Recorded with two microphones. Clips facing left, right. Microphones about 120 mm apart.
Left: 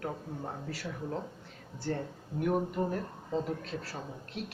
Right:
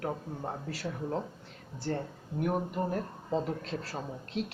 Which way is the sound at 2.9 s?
30° right (ahead or behind).